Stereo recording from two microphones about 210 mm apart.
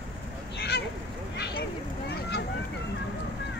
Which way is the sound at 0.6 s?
50° left (ahead or behind).